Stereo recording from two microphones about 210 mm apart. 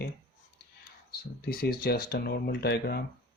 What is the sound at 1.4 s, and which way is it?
Speech, 45° left (ahead or behind).